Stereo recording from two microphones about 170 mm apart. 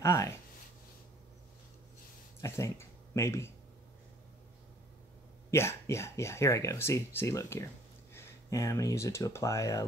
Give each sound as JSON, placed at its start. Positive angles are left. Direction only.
{"t": 0.0, "sound": "speech", "side_deg": 15}
{"t": 2.4, "sound": "speech", "side_deg": 15}
{"t": 5.5, "sound": "speech", "side_deg": 15}